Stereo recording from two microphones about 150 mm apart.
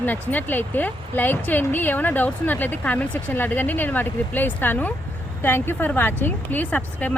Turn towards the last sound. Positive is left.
turn(degrees=10)  # may be behind; listen again after turning